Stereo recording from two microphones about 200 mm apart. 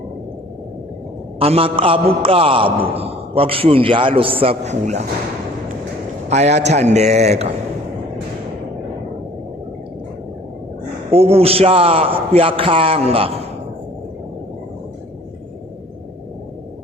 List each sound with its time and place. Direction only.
1.4 s a man's voice: 30° right (ahead or behind)
6.2 s a man's voice: 35° right (ahead or behind)
11.1 s a man's voice: 30° right (ahead or behind)